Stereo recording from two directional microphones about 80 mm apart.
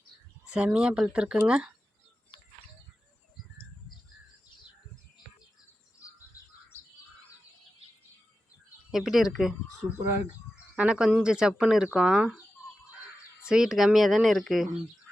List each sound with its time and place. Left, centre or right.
0.4 s speech: centre
8.9 s speech: centre
10.8 s speech: centre
13.4 s speech: centre